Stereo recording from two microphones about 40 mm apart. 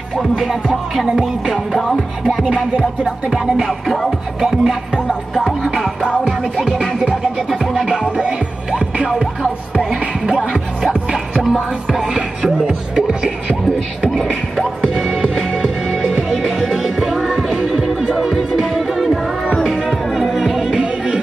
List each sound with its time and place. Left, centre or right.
0.1 s music: centre
1.9 s music: centre
2.4 s music: right
3.3 s music: centre
3.8 s music: centre
4.4 s music: centre
7.7 s music: right
10.9 s music: centre
11.4 s music: centre
14.6 s music: centre
20.7 s music: right